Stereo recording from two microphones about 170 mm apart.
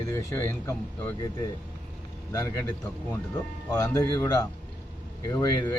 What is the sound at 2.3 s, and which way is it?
Speech, 15° left (ahead or behind).